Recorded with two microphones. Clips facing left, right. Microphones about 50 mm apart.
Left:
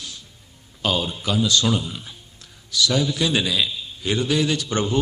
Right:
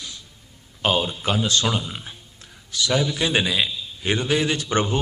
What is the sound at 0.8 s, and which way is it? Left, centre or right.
A man's voice, right.